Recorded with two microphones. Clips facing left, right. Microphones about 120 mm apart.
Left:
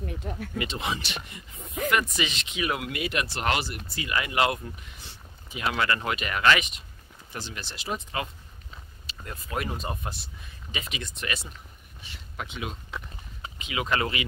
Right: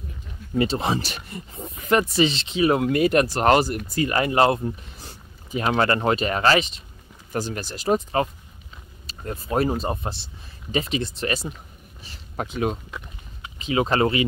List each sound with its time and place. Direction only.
0.0 s speech: 70° left (ahead or behind)
0.6 s speech: 35° right (ahead or behind)
7.3 s speech: 45° right (ahead or behind)